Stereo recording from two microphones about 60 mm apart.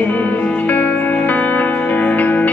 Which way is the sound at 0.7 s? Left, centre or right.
Left.